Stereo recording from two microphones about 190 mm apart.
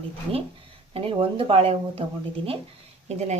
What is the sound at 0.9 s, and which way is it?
Speech, 30° right (ahead or behind).